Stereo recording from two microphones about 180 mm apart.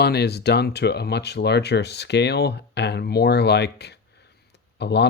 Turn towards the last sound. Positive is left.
turn(degrees=70)  # may be behind; listen again after turning